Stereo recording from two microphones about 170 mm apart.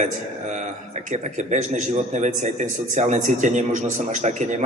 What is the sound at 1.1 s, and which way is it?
A man's voice, 45° right (ahead or behind).